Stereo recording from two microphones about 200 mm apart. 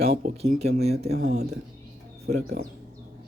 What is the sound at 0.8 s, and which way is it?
Speech, 30° right (ahead or behind).